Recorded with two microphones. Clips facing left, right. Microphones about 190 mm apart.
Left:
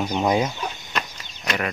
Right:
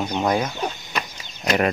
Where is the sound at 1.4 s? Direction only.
35° right (ahead or behind).